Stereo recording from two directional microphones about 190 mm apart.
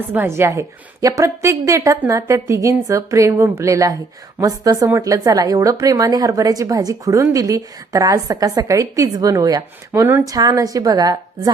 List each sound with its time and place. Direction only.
0.1 s a woman's voice: 10° right (ahead or behind)